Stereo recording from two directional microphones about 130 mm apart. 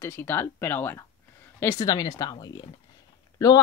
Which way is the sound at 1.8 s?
30° left (ahead or behind).